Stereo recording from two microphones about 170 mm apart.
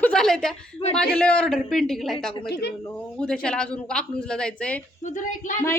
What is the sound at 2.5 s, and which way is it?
Speech, 80° left.